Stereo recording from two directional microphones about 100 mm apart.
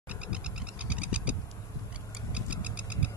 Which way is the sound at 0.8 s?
10° right (ahead or behind).